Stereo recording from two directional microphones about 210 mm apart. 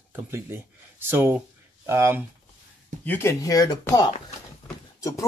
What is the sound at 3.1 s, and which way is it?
Speech, 10° left (ahead or behind).